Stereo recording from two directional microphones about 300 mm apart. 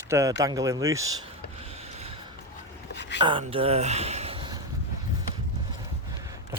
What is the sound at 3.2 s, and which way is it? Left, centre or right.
Speech, centre.